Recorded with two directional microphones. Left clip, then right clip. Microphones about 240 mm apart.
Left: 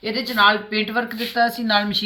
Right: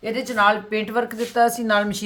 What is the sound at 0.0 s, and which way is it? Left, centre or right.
Speech, right.